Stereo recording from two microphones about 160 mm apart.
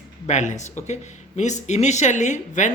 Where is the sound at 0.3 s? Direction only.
45° left (ahead or behind).